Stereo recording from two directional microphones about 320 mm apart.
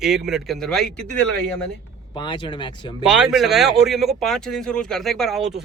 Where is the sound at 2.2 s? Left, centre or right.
Centre.